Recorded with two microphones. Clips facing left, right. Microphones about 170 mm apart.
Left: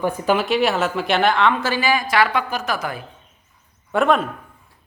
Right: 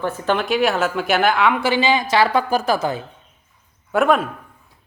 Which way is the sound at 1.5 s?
15° right (ahead or behind).